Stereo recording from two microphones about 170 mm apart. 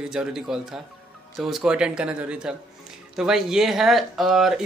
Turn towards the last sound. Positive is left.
turn(degrees=0)  # may be behind; listen again after turning